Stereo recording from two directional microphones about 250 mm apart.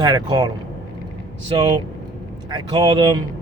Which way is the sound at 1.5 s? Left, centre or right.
Centre.